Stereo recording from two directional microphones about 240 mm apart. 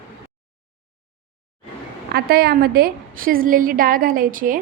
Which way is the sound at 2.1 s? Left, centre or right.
Right.